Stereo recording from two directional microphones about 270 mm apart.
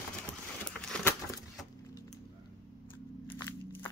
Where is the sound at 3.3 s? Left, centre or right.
Centre.